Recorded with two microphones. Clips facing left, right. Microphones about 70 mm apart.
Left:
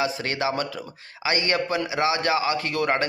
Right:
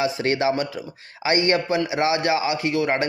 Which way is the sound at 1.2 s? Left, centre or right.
Right.